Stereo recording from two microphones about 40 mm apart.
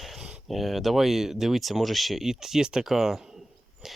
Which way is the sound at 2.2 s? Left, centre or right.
Centre.